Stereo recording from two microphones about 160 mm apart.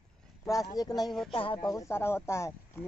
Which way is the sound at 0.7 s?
25° left (ahead or behind).